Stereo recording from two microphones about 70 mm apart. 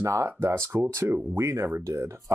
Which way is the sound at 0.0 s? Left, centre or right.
Right.